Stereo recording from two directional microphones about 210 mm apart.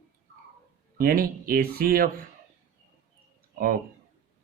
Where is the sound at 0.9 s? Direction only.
45° right (ahead or behind).